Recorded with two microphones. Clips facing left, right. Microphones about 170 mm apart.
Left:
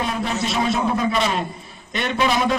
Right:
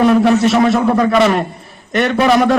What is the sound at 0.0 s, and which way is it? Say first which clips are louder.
A man's voice: right 13 dB; 65° right (ahead or behind).